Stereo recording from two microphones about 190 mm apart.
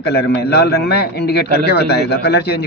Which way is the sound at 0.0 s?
60° left (ahead or behind).